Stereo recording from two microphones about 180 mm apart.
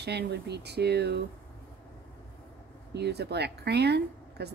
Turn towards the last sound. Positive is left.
turn(degrees=-65)  # may be behind; listen again after turning